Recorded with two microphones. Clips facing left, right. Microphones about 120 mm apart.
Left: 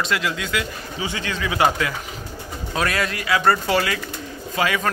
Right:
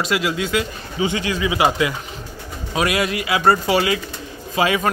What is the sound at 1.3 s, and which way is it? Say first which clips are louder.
A man's voice: even; 5° right (ahead or behind).